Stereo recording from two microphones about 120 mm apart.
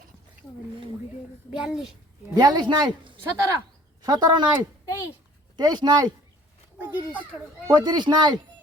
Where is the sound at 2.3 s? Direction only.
35° right (ahead or behind).